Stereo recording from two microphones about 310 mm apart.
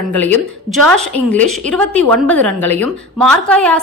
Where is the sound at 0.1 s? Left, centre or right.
Centre.